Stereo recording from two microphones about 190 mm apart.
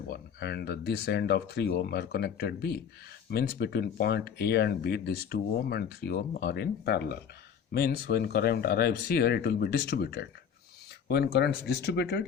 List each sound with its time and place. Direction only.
0.1 s speech: 60° left (ahead or behind)